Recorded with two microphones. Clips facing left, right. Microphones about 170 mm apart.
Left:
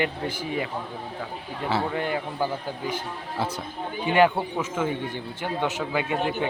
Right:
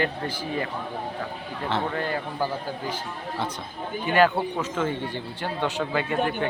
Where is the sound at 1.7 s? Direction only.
10° left (ahead or behind).